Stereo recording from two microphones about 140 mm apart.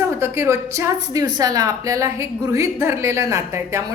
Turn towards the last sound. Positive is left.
turn(degrees=-20)  # may be behind; listen again after turning